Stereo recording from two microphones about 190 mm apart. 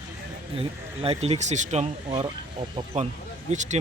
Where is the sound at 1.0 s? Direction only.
30° right (ahead or behind).